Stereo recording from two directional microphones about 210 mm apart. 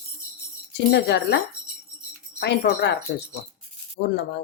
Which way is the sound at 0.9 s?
50° left (ahead or behind).